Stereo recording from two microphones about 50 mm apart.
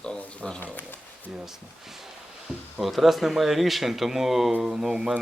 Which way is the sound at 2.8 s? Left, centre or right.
Centre.